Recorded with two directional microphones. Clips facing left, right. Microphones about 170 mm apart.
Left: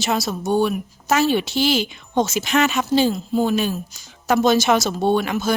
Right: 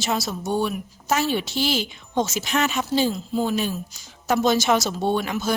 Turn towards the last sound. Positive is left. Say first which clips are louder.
# left 4 dB
turn(degrees=70)  # may be behind; listen again after turning